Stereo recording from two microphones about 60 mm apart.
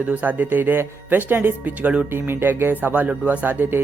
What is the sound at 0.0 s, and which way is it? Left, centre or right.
Speech, right.